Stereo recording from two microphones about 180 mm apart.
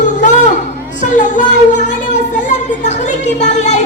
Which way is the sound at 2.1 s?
40° left (ahead or behind).